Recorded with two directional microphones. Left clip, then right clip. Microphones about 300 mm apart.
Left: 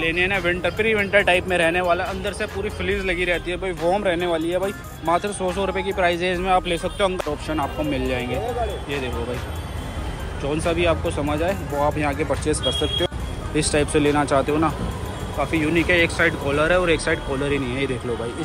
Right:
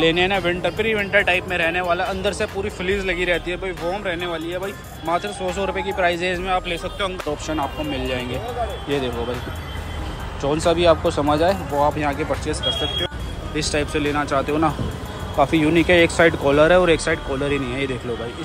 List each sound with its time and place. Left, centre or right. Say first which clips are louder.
0.1 s speech: right 1 dB; centre
10.4 s speech: right 4 dB; centre
13.6 s speech: left 2 dB; centre